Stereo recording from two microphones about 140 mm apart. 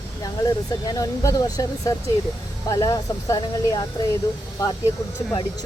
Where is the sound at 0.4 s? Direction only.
25° left (ahead or behind).